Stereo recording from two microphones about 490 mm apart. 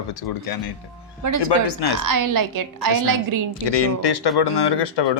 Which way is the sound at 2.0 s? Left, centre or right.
Right.